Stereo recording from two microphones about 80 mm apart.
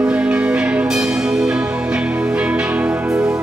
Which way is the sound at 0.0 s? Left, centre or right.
Centre.